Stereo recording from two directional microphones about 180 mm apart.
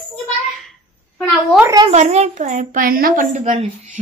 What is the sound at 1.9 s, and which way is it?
A woman's voice, 40° right (ahead or behind).